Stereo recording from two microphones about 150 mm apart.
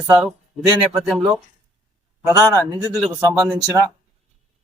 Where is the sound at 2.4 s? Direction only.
25° right (ahead or behind).